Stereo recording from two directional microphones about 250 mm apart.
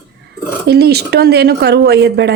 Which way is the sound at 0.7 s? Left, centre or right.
Right.